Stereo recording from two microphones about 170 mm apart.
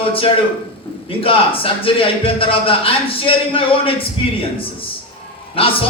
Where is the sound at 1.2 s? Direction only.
30° left (ahead or behind).